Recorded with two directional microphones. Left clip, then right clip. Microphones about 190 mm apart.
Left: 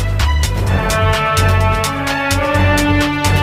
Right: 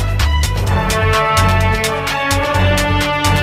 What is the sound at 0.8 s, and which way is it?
Music, centre (ahead or behind).